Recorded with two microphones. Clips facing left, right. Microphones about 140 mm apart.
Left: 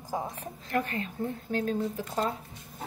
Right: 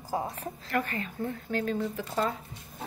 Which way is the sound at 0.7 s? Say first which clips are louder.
Left 1 dB; 45° right (ahead or behind).